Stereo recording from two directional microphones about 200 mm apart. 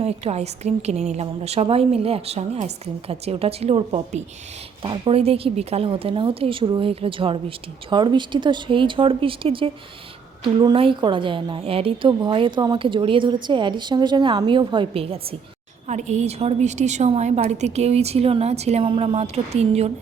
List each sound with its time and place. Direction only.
0.0 s a woman's voice: 30° right (ahead or behind)